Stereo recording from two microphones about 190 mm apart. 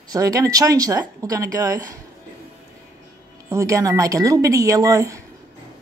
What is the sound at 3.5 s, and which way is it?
Speech, 15° right (ahead or behind).